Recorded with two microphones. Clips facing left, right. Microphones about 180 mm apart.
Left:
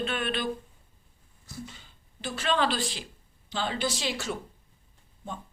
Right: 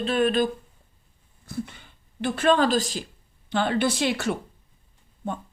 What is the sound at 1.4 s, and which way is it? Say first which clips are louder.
Speech: right 9 dB; 60° right (ahead or behind).